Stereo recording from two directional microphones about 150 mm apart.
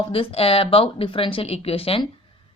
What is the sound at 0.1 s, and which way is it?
Speech, 40° left (ahead or behind).